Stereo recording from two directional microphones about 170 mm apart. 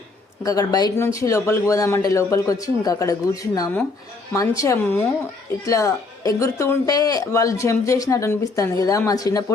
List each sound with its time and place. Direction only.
0.4 s speech: 20° left (ahead or behind)